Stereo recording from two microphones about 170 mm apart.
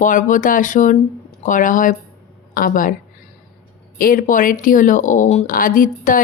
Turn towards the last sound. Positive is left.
turn(degrees=55)  # may be behind; listen again after turning